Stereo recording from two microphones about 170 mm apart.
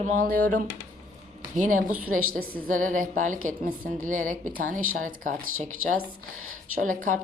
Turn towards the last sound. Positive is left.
turn(degrees=-50)  # may be behind; listen again after turning